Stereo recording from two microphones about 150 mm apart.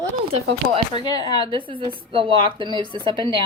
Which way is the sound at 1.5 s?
35° right (ahead or behind).